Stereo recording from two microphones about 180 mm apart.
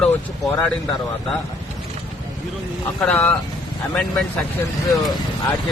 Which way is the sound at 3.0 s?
10° left (ahead or behind).